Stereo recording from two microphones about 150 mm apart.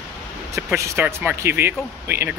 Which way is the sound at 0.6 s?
15° right (ahead or behind).